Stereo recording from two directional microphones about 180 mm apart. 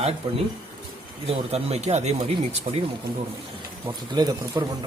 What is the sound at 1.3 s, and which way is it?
Speech, 35° right (ahead or behind).